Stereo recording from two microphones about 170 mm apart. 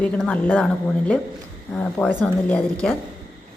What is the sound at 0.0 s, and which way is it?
Speech, 5° left (ahead or behind).